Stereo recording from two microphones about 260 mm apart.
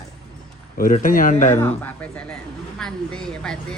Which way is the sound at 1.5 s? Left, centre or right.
Centre.